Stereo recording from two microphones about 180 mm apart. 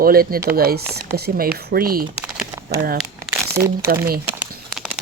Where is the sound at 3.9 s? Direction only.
55° right (ahead or behind).